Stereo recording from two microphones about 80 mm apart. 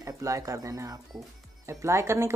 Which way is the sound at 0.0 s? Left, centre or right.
Right.